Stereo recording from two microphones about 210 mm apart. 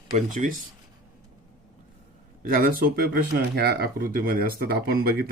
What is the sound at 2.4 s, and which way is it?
Speech, 45° right (ahead or behind).